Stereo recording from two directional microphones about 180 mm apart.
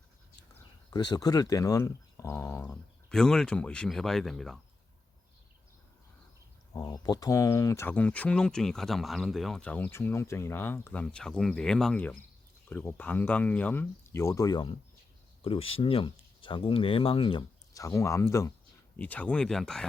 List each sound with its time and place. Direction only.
0.9 s speech: 20° left (ahead or behind)
3.1 s speech: 5° left (ahead or behind)
6.7 s speech: 20° left (ahead or behind)
17.7 s speech: 15° left (ahead or behind)